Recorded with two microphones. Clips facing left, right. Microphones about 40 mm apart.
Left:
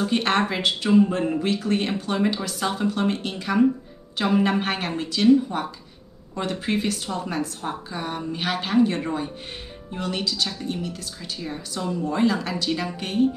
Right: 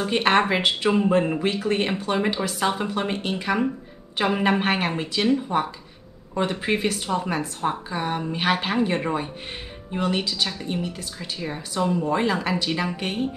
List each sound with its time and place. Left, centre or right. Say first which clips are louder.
0.0 s speech: right 2 dB; right